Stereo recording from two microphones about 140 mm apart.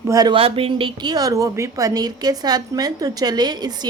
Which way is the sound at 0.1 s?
30° right (ahead or behind).